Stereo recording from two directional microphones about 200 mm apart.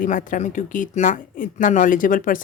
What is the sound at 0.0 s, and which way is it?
Speech, 40° left (ahead or behind).